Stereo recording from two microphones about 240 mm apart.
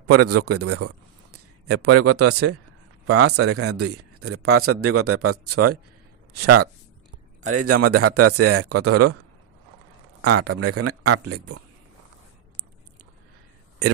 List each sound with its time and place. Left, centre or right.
0.0 s speech: right
10.2 s speech: right